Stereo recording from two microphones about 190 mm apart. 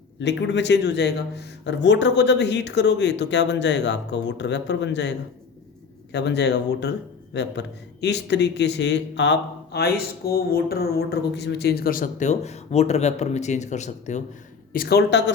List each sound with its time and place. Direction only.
0.2 s speech: 65° left (ahead or behind)
8.0 s a man's voice: 65° left (ahead or behind); by 14.2 s 40° left (ahead or behind)
14.7 s speech: 50° left (ahead or behind)